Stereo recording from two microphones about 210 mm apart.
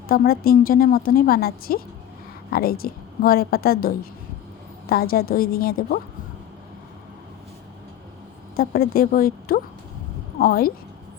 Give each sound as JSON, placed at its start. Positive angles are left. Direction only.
{"t": 0.1, "sound": "a woman's voice", "side_deg": 45}
{"t": 8.5, "sound": "a woman's voice", "side_deg": 45}